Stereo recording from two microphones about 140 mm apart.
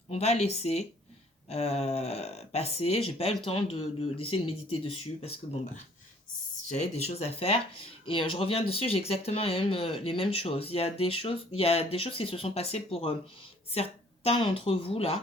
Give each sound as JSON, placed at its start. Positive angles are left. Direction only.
{"t": 0.1, "sound": "speech", "side_deg": 50}
{"t": 6.7, "sound": "speech", "side_deg": 50}